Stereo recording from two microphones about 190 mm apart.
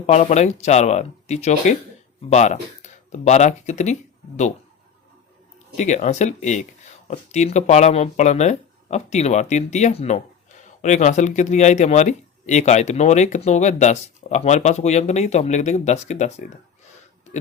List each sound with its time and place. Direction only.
0.0 s speech: 35° left (ahead or behind)
5.7 s speech: 40° left (ahead or behind)